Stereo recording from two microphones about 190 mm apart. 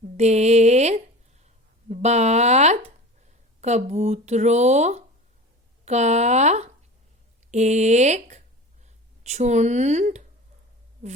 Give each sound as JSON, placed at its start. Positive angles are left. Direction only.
{"t": 0.0, "sound": "speech", "side_deg": -35}